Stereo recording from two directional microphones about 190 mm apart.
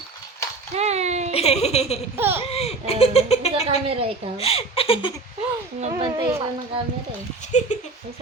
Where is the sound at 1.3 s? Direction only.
35° left (ahead or behind).